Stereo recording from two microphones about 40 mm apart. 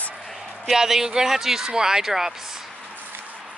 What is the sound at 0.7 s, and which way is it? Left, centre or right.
Speech, centre.